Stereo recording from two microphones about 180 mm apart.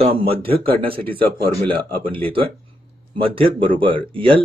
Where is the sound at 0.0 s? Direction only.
30° right (ahead or behind).